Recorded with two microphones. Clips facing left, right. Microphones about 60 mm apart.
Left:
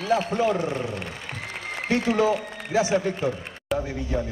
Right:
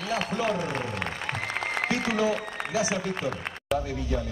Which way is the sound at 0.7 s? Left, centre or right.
Right.